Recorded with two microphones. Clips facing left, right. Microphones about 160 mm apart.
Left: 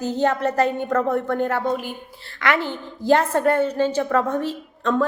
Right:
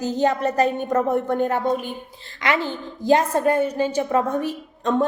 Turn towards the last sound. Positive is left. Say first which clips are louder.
# even
turn(degrees=-15)  # may be behind; listen again after turning